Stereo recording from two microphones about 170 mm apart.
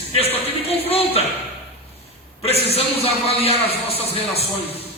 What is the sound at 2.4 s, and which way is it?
A man's voice, 35° left (ahead or behind).